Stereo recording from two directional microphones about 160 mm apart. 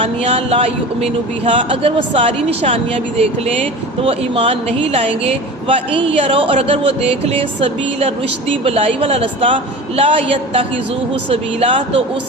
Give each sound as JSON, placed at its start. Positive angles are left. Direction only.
{"t": 0.0, "sound": "a man's voice", "side_deg": -40}